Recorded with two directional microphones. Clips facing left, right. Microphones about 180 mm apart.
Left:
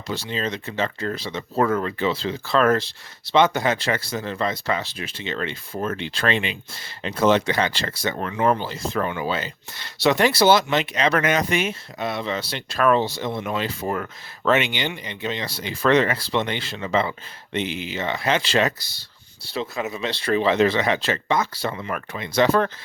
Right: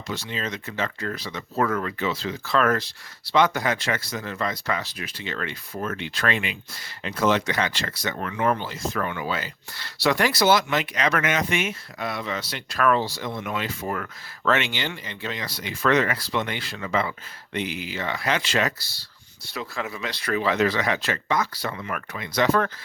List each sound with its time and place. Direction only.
0.1 s speech: 30° left (ahead or behind)